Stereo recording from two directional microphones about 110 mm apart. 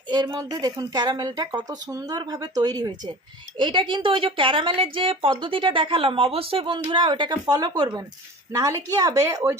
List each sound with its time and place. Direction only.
0.1 s speech: 40° right (ahead or behind)
3.6 s a woman's voice: 50° right (ahead or behind); by 9.6 s 30° right (ahead or behind)